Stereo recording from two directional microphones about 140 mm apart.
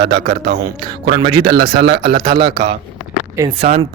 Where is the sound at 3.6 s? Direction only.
50° right (ahead or behind).